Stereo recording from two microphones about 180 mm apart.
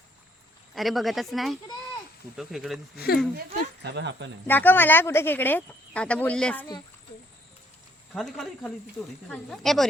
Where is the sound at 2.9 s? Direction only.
60° left (ahead or behind).